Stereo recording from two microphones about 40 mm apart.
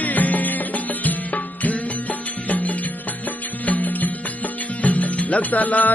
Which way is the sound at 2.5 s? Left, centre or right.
Left.